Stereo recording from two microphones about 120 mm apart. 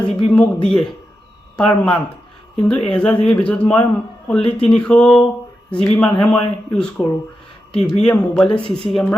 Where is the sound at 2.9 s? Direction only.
10° left (ahead or behind).